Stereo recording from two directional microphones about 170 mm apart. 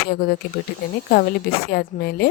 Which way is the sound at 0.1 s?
65° left (ahead or behind).